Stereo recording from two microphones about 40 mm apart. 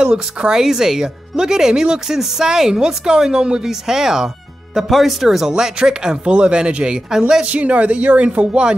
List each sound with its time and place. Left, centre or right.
0.0 s speech: right
4.8 s speech: centre
5.5 s speech: right
7.4 s speech: right